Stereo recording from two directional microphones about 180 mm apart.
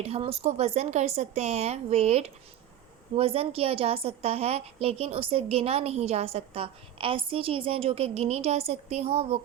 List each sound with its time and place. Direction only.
0.0 s a woman's voice: 35° right (ahead or behind)